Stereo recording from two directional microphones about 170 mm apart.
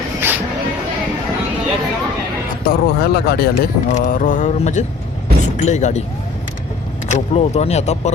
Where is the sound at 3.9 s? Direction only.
50° left (ahead or behind).